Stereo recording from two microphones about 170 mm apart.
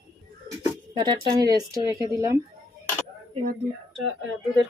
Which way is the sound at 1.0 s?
25° right (ahead or behind).